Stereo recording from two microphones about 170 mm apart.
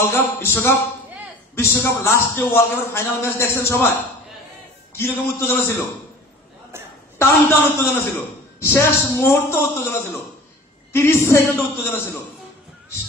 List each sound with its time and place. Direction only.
0.0 s a man's voice: 15° left (ahead or behind)
7.2 s speech: 20° left (ahead or behind)